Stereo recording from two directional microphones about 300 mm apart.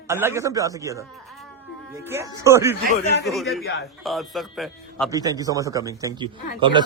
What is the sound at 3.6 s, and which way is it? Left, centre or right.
Speech, left.